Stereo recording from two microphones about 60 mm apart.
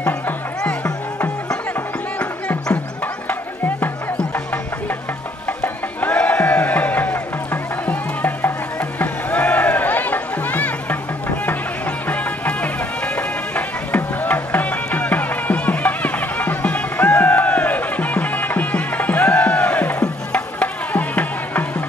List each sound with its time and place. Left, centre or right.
0.6 s music: centre
3.3 s music: left
5.6 s music: left
12.1 s music: left